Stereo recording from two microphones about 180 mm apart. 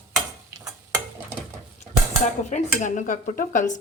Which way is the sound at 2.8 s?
45° left (ahead or behind).